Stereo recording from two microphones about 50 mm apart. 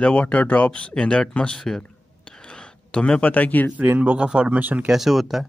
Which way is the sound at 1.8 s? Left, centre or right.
Centre.